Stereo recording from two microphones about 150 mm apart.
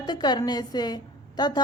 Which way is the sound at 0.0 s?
30° left (ahead or behind).